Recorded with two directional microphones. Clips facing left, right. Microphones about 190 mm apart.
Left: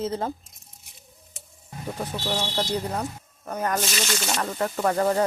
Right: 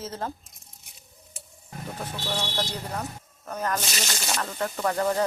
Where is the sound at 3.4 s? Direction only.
10° left (ahead or behind).